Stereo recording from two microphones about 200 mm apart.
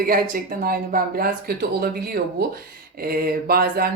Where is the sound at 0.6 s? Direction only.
45° right (ahead or behind).